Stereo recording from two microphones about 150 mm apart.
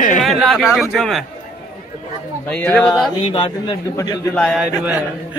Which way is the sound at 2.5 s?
10° left (ahead or behind).